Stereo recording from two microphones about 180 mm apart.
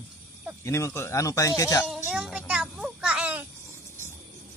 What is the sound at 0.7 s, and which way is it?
A man's voice, 15° left (ahead or behind).